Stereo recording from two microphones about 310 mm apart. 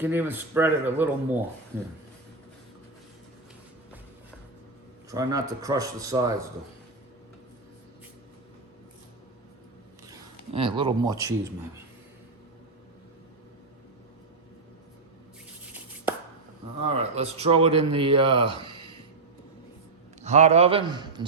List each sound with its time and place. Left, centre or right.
0.0 s a man's voice: centre
5.1 s a man's voice: centre
10.1 s speech: centre
16.8 s a man's voice: centre
20.2 s a man's voice: right